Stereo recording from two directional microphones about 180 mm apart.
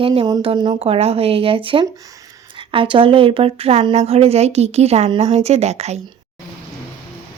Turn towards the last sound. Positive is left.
turn(degrees=-35)  # may be behind; listen again after turning